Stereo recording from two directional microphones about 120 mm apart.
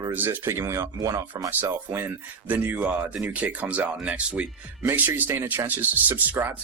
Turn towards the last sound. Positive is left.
turn(degrees=-15)  # may be behind; listen again after turning